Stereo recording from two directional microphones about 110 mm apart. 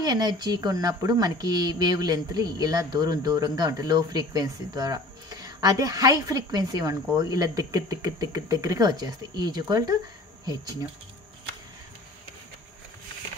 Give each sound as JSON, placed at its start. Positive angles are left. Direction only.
{"t": 0.0, "sound": "a woman's voice", "side_deg": -40}